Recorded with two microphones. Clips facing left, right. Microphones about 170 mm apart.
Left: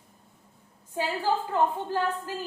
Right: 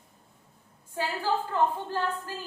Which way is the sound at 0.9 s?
15° left (ahead or behind).